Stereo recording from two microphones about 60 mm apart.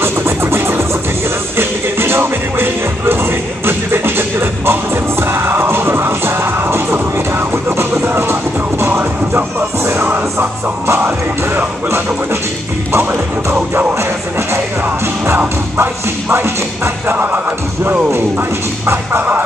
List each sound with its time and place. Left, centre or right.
0.0 s music: right
10.0 s music: right
13.1 s music: right
15.3 s music: right
17.1 s music: right